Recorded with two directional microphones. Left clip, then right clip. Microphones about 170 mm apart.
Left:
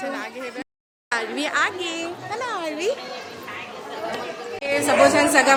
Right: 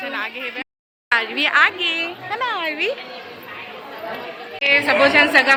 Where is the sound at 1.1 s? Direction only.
Centre (ahead or behind).